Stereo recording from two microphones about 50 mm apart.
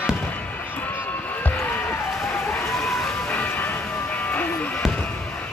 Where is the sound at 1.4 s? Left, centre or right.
Left.